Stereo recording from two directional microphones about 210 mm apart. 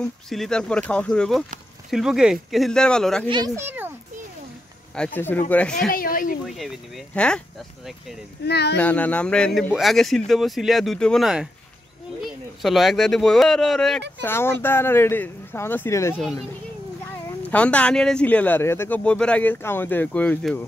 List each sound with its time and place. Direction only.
0.0 s speech: centre (ahead or behind)
3.3 s speech: 20° right (ahead or behind)
4.9 s speech: 5° left (ahead or behind)
5.9 s a sound: 40° left (ahead or behind)
6.4 s speech: centre (ahead or behind)
8.5 s speech: 50° left (ahead or behind)
8.7 s speech: 5° left (ahead or behind)
12.6 s speech: centre (ahead or behind)
16.2 s speech: centre (ahead or behind)